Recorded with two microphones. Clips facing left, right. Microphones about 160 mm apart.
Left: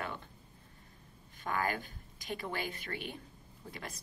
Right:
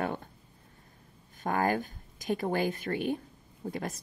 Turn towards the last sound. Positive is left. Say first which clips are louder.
# right 10 dB
turn(degrees=-45)  # may be behind; listen again after turning